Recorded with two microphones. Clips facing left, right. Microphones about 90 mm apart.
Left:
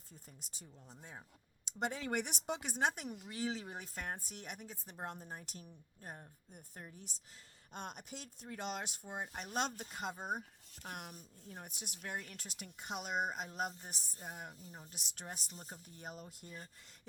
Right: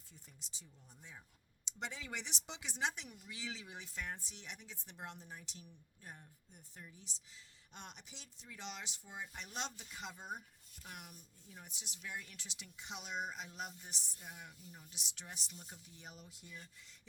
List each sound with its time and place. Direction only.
0.1 s a woman's voice: 45° left (ahead or behind)
10.7 s a woman's voice: 60° left (ahead or behind)